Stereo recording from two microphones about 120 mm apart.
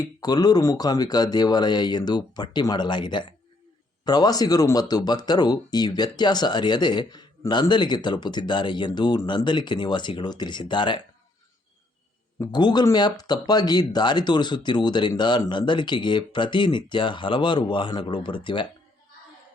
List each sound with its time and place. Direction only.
0.2 s speech: 35° left (ahead or behind)
12.5 s speech: 35° left (ahead or behind)